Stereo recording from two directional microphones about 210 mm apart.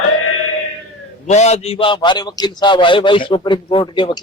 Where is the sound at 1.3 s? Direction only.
30° left (ahead or behind).